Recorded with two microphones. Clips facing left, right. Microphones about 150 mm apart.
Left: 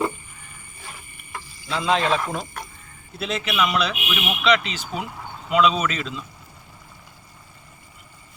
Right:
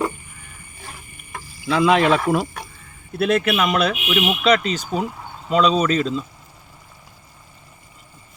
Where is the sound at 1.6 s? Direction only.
60° right (ahead or behind); by 6.2 s 40° right (ahead or behind).